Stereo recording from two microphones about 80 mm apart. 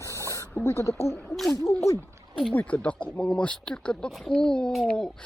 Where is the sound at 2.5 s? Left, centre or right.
Centre.